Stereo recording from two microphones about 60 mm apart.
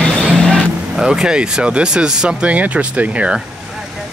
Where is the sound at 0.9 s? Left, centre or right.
Centre.